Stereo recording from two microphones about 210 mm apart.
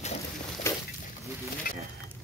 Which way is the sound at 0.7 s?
10° left (ahead or behind).